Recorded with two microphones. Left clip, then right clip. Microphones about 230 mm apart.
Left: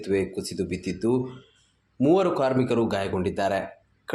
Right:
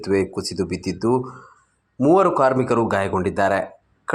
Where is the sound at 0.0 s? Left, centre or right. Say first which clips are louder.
Right 5 dB; centre.